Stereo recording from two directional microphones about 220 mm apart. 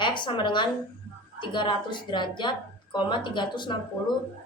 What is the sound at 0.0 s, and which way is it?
A woman's voice, 20° left (ahead or behind).